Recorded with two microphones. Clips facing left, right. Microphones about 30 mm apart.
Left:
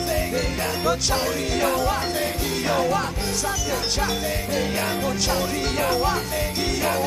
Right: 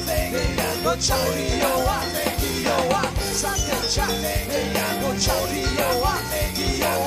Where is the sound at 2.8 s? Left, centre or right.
Right.